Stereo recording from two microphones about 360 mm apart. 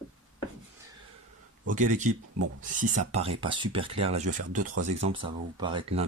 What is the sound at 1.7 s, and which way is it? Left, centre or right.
Speech, right.